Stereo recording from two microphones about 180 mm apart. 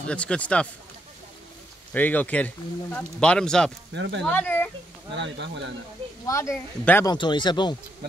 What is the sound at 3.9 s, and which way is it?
Speech, 85° right.